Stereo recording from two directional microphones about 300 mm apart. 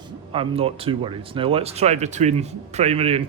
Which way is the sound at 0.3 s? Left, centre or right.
Centre.